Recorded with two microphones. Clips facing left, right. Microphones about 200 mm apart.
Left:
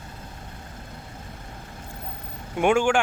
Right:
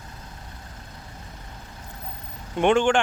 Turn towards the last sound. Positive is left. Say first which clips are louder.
# right 1 dB
turn(degrees=10)  # may be behind; listen again after turning